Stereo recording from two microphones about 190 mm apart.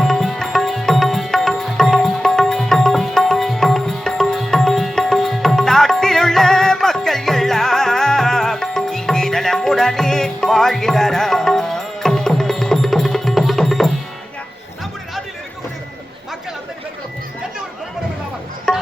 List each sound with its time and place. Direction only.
0.0 s music: centre (ahead or behind)
18.7 s music: 5° left (ahead or behind)